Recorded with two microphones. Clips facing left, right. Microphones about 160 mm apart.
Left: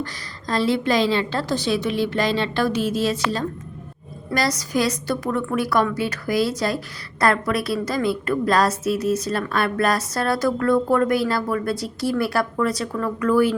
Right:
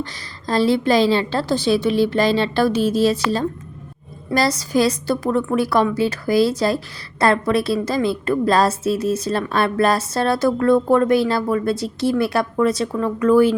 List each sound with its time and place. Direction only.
0.0 s a woman's voice: 30° right (ahead or behind)